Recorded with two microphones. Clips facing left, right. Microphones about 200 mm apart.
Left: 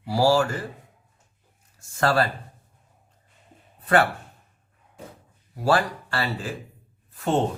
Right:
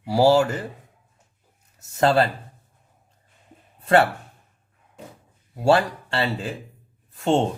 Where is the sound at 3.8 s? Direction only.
25° right (ahead or behind).